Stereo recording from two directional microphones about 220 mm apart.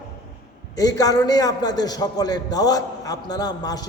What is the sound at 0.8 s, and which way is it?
A man's voice, 15° left (ahead or behind).